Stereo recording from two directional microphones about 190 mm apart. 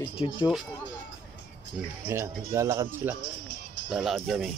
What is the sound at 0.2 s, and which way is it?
Speech, 30° left (ahead or behind).